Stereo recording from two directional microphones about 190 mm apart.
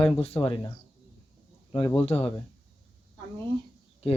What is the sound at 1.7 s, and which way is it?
Speech, 25° left (ahead or behind).